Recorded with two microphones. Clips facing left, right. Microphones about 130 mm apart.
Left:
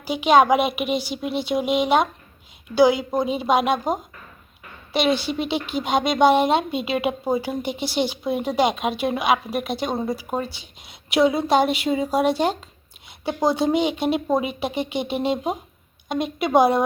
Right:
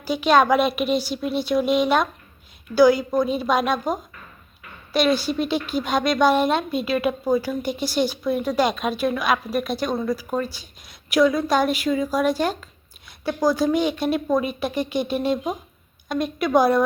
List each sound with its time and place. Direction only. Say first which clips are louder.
0.0 s a woman's voice: left 1 dB; 15° left (ahead or behind)